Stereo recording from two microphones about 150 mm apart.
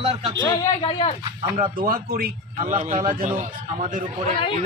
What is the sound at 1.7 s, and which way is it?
Speech, 70° right (ahead or behind).